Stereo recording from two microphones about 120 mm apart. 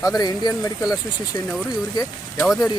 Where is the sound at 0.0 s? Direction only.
35° left (ahead or behind).